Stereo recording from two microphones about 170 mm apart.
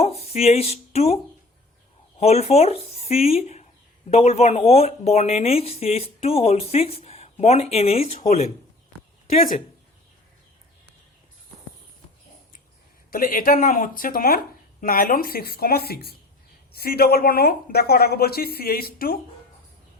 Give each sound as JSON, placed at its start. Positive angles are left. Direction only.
{"t": 0.0, "sound": "speech", "side_deg": 35}
{"t": 13.1, "sound": "speech", "side_deg": 55}